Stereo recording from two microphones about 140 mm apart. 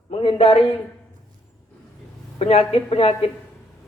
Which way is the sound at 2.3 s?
45° left (ahead or behind).